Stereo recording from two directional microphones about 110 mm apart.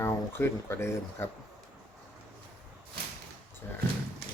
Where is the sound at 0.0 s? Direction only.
25° left (ahead or behind).